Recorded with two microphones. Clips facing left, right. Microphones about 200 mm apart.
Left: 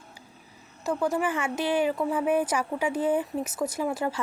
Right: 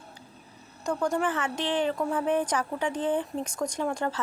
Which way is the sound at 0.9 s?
5° left (ahead or behind).